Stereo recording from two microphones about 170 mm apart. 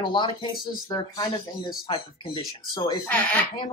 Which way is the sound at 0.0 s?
30° left (ahead or behind).